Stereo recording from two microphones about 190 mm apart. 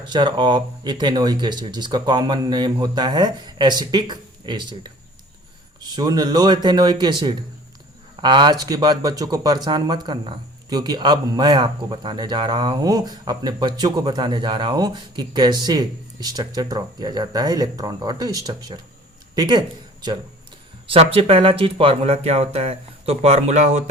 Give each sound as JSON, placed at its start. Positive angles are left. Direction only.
{"t": 0.0, "sound": "a man's voice", "side_deg": -25}